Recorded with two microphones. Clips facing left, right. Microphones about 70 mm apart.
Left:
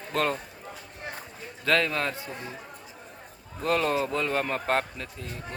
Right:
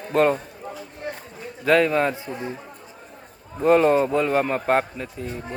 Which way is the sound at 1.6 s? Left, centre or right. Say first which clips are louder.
Right 7 dB; centre.